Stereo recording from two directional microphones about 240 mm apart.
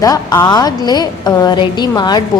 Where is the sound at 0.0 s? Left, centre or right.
Centre.